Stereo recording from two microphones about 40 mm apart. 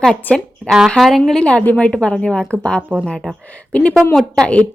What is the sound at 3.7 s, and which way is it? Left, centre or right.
Speech, left.